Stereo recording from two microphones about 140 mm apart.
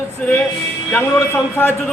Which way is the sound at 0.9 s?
15° left (ahead or behind).